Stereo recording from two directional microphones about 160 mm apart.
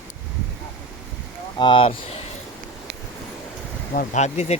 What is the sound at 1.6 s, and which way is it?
Speech, 30° left (ahead or behind).